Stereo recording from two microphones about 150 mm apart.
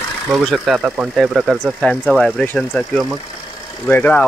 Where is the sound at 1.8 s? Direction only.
5° left (ahead or behind).